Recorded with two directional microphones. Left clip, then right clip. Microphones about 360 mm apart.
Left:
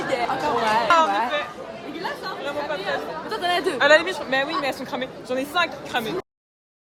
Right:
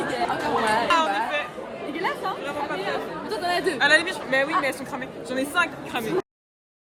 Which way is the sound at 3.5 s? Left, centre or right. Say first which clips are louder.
Left 3 dB; left.